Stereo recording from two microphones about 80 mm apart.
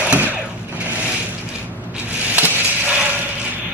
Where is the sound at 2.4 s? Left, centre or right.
Right.